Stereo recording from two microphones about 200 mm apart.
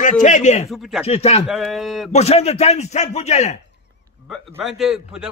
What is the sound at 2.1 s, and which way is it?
Speech, 30° left (ahead or behind).